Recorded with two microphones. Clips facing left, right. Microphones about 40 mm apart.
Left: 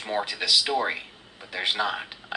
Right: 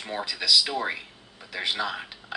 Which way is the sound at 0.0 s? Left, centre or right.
Left.